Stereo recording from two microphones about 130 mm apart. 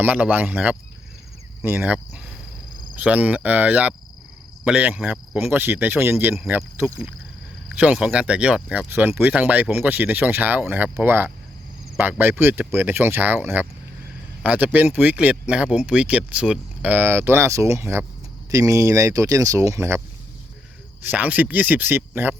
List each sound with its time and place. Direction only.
0.0 s speech: 10° right (ahead or behind)
21.0 s speech: 10° right (ahead or behind)